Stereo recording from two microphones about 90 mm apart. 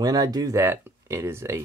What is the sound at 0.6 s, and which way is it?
Speech, 30° right (ahead or behind).